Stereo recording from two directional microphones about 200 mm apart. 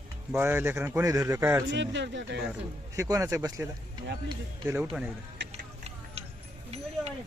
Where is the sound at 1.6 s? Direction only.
60° right (ahead or behind).